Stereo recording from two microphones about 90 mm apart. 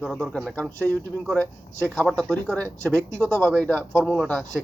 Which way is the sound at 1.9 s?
Centre (ahead or behind).